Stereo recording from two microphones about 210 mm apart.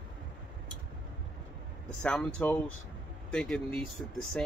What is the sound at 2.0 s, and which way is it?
Speech, 5° left (ahead or behind).